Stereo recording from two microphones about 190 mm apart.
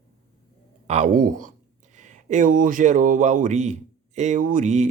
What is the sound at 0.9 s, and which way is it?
Speech, 40° right (ahead or behind).